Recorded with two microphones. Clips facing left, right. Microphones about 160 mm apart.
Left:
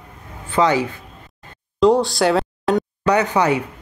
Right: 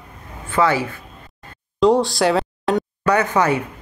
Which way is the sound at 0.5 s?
15° left (ahead or behind).